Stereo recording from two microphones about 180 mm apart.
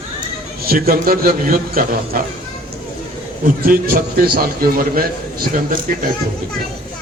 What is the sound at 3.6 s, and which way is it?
A man's voice, 50° right (ahead or behind).